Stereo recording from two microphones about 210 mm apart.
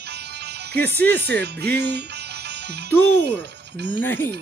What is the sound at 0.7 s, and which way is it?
Speech, 10° left (ahead or behind).